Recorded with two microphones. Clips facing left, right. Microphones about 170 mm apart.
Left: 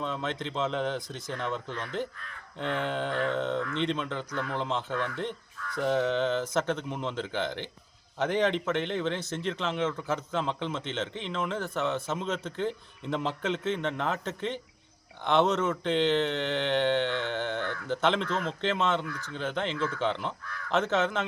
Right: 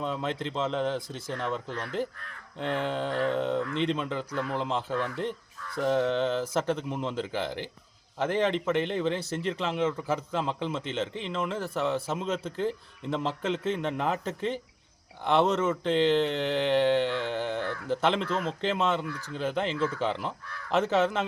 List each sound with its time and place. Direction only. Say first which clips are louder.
0.0 s speech: right 2 dB; 5° right (ahead or behind)
1.7 s speech: right 1 dB; 35° right (ahead or behind)
2.6 s speech: right 1 dB; centre (ahead or behind)
5.8 s speech: right 1 dB; centre (ahead or behind)